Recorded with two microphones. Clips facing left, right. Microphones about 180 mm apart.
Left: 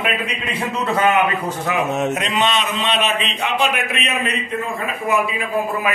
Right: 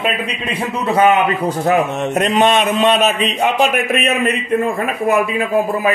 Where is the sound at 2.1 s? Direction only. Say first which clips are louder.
Right 7 dB; 45° right (ahead or behind).